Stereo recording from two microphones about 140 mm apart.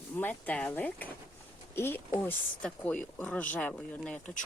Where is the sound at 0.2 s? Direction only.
15° left (ahead or behind).